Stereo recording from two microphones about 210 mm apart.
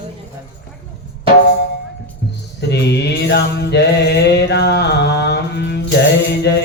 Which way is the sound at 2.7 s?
50° left (ahead or behind).